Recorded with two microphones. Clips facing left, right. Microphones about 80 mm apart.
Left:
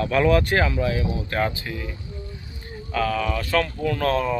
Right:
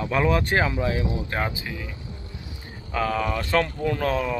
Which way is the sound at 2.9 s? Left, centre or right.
Centre.